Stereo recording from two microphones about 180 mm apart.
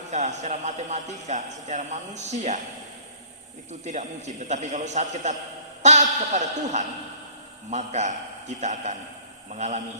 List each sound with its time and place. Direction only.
0.1 s speech: 40° right (ahead or behind)
4.4 s speech: 40° right (ahead or behind)